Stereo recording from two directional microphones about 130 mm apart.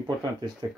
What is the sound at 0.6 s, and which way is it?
Speech, 30° right (ahead or behind).